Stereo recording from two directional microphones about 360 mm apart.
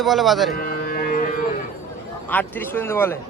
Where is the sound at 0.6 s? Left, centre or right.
Left.